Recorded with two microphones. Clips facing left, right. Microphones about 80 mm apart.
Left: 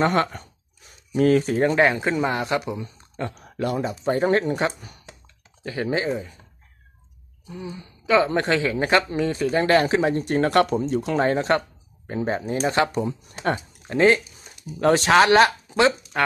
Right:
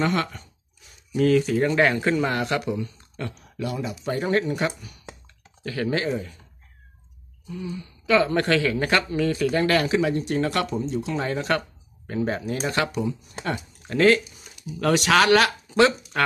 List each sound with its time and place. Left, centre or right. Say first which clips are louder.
0.0 s speech: left 4 dB; left
1.8 s a woman's voice: left 1 dB; centre
3.3 s speech: left 4 dB; left
5.6 s a woman's voice: left 1 dB; left
7.4 s a woman's voice: right 2 dB; left
13.0 s speech: left 3 dB; left
13.8 s a woman's voice: left 1 dB; left